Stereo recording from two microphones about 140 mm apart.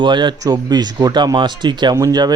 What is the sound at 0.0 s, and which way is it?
Speech, 35° right (ahead or behind).